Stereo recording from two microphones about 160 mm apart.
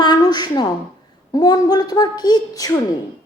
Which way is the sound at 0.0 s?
25° left (ahead or behind).